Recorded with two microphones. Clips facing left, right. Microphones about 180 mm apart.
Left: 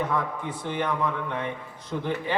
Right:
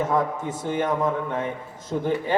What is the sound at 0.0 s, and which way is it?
A man's voice, 45° right (ahead or behind).